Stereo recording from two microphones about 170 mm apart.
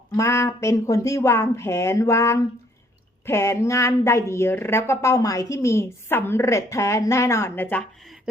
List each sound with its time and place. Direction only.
0.2 s a woman's voice: 15° left (ahead or behind)